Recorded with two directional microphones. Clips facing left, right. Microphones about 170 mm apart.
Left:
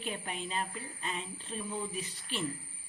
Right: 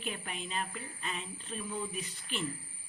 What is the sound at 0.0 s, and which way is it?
Speech, 35° left (ahead or behind).